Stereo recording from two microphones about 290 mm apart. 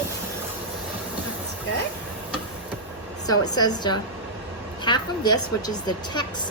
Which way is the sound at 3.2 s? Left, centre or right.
Centre.